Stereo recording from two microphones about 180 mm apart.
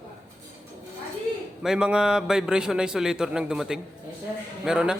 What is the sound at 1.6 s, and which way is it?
A man's voice, 5° right (ahead or behind).